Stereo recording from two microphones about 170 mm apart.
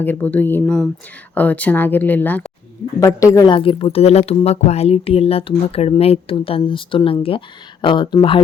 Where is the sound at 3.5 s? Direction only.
30° left (ahead or behind).